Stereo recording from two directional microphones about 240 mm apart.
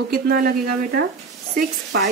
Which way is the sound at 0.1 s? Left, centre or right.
Right.